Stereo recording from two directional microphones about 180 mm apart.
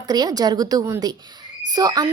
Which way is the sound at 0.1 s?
20° right (ahead or behind).